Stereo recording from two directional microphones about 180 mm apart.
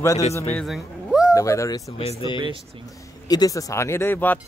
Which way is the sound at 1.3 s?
15° left (ahead or behind).